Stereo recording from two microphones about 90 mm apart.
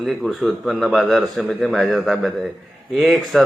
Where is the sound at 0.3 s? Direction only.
Centre (ahead or behind).